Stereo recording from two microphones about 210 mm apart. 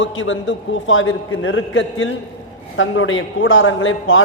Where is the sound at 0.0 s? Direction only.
65° left (ahead or behind).